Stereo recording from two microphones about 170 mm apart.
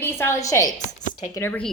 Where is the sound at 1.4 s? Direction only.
10° left (ahead or behind).